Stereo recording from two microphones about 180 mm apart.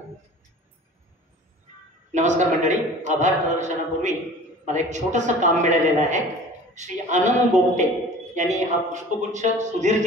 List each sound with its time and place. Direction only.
2.1 s a man's voice: 40° right (ahead or behind)